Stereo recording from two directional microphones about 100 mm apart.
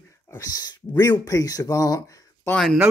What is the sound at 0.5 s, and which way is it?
Speech, 40° left (ahead or behind).